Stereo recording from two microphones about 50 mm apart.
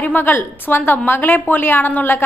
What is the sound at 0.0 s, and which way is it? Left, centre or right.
A woman's voice, left.